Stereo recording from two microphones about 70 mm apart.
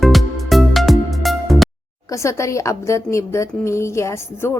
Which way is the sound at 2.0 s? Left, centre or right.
Left.